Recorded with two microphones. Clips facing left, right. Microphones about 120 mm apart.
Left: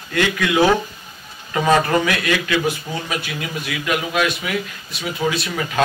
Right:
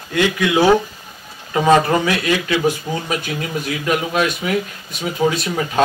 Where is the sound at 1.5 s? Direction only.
20° right (ahead or behind).